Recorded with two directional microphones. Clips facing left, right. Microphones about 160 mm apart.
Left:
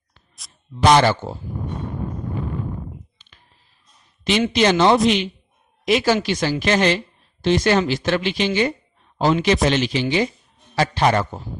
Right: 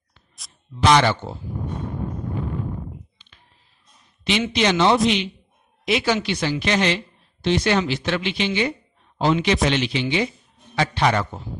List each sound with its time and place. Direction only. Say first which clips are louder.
0.9 s speech: left 2 dB; 45° left (ahead or behind)
4.2 s a man's voice: left 3 dB; 45° left (ahead or behind)